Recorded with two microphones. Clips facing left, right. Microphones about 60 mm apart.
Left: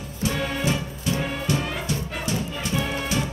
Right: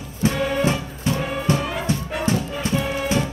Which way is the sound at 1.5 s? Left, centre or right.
Right.